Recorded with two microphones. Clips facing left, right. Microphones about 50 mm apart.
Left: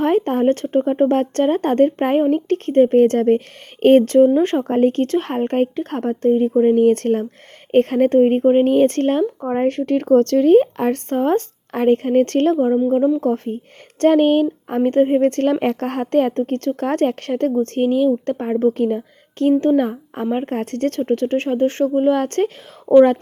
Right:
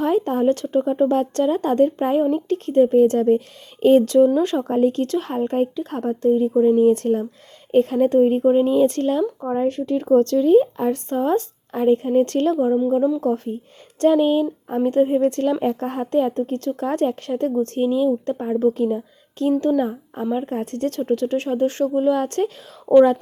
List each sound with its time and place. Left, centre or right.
0.0 s speech: left
13.2 s a woman's voice: left
19.8 s a woman's voice: left